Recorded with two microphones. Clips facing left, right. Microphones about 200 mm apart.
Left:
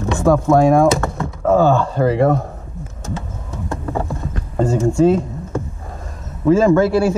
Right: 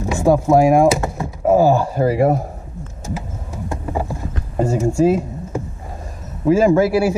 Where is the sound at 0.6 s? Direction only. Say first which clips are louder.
Even; 10° right (ahead or behind).